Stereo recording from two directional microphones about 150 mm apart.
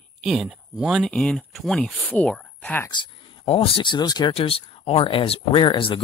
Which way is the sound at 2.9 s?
35° left (ahead or behind).